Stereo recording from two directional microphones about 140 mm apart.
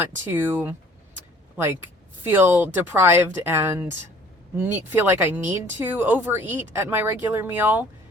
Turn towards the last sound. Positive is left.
turn(degrees=-15)  # may be behind; listen again after turning